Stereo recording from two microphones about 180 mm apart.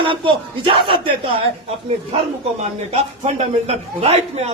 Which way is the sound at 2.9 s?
35° right (ahead or behind).